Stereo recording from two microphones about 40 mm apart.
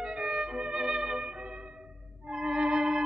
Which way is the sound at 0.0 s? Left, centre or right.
Centre.